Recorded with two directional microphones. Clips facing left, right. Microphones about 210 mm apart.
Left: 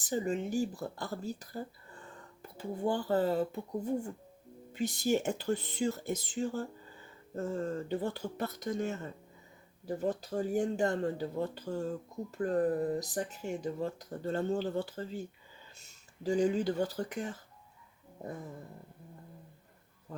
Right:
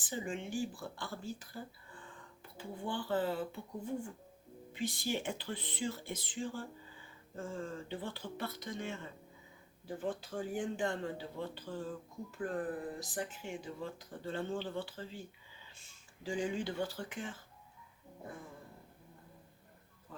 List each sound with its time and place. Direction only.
0.0 s speech: 40° left (ahead or behind)